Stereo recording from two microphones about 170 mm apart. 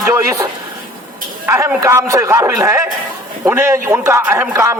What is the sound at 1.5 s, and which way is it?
A man's voice, 15° right (ahead or behind).